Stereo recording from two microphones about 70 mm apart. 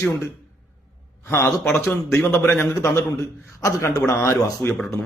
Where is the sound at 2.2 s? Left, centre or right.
Left.